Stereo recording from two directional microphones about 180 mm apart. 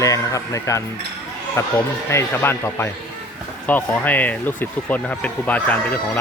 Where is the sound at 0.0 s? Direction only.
20° left (ahead or behind).